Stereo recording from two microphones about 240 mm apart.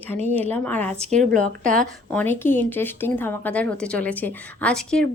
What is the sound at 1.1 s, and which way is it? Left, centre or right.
Speech, right.